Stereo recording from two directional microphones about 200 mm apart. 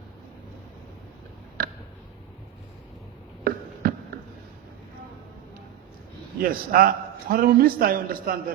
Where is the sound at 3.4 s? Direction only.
45° right (ahead or behind).